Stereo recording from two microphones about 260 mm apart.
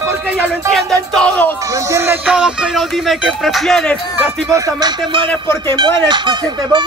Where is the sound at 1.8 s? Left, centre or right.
Centre.